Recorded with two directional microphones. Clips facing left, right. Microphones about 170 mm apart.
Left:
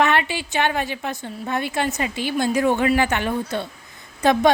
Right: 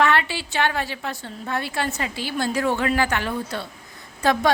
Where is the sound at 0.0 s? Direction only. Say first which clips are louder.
Left 1 dB; 20° left (ahead or behind).